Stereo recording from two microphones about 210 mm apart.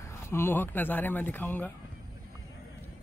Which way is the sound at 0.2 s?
10° left (ahead or behind).